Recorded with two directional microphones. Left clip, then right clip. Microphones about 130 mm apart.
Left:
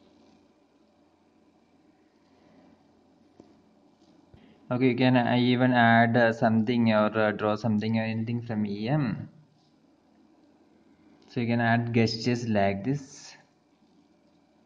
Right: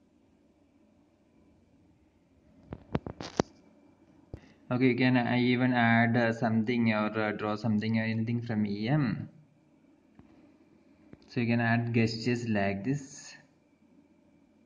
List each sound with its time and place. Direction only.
4.6 s a man's voice: 25° left (ahead or behind)
4.9 s speech: 40° left (ahead or behind); by 9.2 s 20° left (ahead or behind)
11.3 s speech: 25° left (ahead or behind)
11.6 s speech: 35° left (ahead or behind)